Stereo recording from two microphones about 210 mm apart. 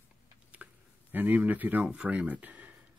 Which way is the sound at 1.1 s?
10° right (ahead or behind).